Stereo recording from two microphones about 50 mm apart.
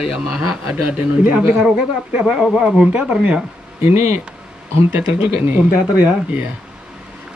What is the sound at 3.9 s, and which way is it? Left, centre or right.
Speech, right.